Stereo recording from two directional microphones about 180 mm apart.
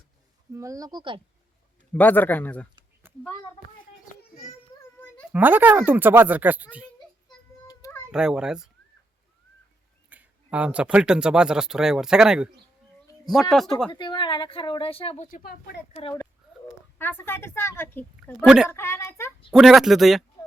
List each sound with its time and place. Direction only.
0.5 s speech: 20° right (ahead or behind)
1.9 s a woman's voice: 10° left (ahead or behind)
3.1 s a sound: 10° right (ahead or behind)
5.3 s speech: 10° right (ahead or behind)
7.7 s a sound: 15° left (ahead or behind)
8.1 s speech: 5° right (ahead or behind)
10.1 s speech: 10° right (ahead or behind)
13.5 s speech: centre (ahead or behind)
13.9 s a woman's voice: 25° left (ahead or behind)
15.3 s speech: 60° left (ahead or behind)
17.0 s a woman's voice: 10° left (ahead or behind)
18.4 s speech: 5° right (ahead or behind)
18.7 s a woman's voice: 15° left (ahead or behind)
19.5 s speech: centre (ahead or behind)